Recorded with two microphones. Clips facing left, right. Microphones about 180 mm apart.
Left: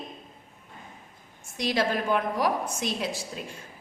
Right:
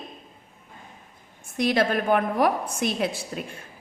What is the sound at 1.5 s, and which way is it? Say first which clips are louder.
A woman's voice: right 4 dB; 55° right (ahead or behind).